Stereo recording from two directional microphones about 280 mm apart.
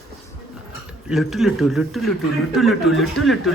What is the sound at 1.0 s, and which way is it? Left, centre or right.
A man's voice, centre.